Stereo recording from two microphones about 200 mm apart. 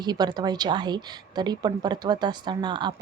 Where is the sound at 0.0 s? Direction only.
20° right (ahead or behind).